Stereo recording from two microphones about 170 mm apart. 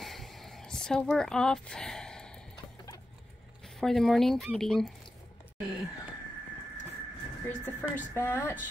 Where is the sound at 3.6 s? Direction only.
Centre (ahead or behind).